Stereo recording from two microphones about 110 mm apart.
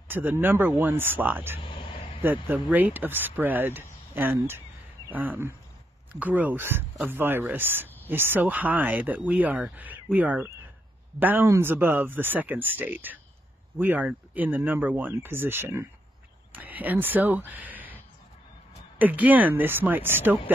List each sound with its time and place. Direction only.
0.1 s speech: 20° right (ahead or behind)
1.6 s a sound: 50° left (ahead or behind)
2.4 s speech: 15° right (ahead or behind)
18.9 s speech: 15° right (ahead or behind)